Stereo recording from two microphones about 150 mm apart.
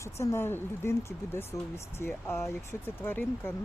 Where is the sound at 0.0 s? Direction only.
20° left (ahead or behind).